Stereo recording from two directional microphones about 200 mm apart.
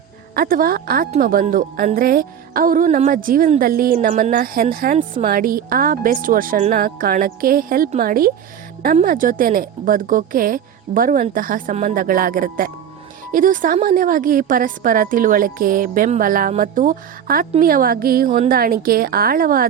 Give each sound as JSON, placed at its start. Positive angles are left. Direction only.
{"t": 0.3, "sound": "a woman's voice", "side_deg": -45}